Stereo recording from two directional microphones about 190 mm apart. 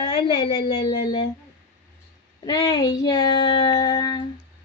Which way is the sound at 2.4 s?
20° left (ahead or behind).